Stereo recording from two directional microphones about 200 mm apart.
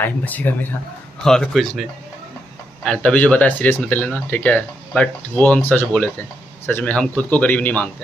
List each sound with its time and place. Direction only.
0.0 s speech: 10° left (ahead or behind)